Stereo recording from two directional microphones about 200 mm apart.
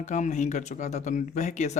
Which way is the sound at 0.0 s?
35° left (ahead or behind).